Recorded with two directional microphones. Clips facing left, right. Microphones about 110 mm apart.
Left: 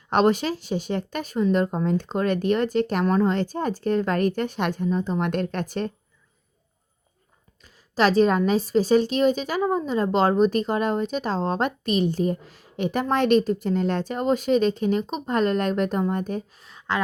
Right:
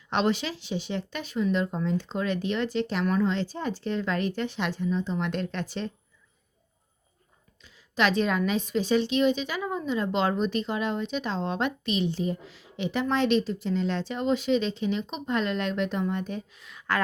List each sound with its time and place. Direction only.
0.1 s a woman's voice: 45° left (ahead or behind)
7.6 s a woman's voice: 40° left (ahead or behind)